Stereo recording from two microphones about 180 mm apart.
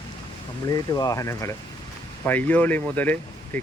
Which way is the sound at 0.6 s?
20° left (ahead or behind).